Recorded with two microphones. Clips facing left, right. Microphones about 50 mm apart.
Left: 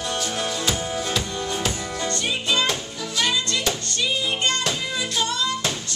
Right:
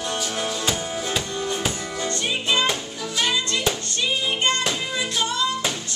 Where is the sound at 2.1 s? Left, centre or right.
Centre.